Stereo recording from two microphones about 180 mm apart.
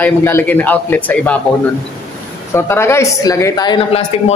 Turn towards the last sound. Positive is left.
turn(degrees=25)  # may be behind; listen again after turning